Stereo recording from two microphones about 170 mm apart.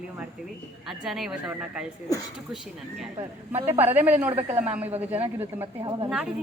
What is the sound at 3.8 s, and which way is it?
Speech, 10° right (ahead or behind).